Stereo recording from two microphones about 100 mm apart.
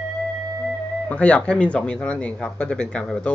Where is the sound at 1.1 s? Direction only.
10° left (ahead or behind).